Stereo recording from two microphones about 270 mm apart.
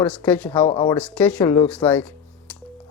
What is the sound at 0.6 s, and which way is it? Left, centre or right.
Speech, centre.